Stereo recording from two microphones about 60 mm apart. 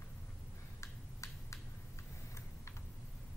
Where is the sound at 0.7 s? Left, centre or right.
Left.